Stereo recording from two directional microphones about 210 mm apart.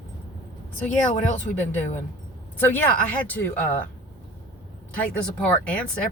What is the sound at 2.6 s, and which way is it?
Speech, 10° left (ahead or behind).